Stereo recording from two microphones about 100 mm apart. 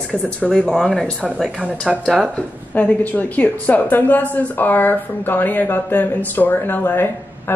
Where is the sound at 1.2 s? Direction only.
10° right (ahead or behind).